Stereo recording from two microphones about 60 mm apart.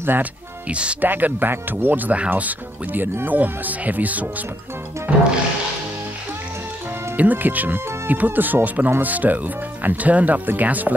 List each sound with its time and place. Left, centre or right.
0.0 s speech: right
0.7 s speech: centre
1.0 s speech: right
5.1 s music: right
7.2 s speech: right